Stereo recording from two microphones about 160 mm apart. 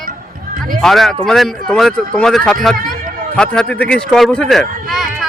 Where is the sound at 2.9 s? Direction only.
5° left (ahead or behind).